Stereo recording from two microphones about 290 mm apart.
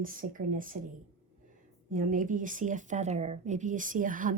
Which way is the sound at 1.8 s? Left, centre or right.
Right.